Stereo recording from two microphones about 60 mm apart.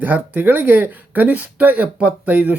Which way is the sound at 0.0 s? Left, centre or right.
Right.